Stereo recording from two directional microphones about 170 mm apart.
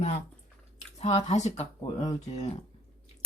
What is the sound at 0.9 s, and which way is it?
Speech, 40° left (ahead or behind).